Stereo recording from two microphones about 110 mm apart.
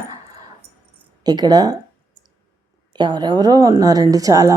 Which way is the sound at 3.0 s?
45° right (ahead or behind).